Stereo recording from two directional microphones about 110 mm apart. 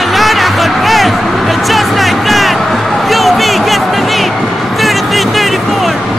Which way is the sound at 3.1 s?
Centre (ahead or behind).